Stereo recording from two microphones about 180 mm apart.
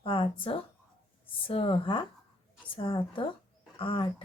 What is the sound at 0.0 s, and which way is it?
Speech, 30° left (ahead or behind).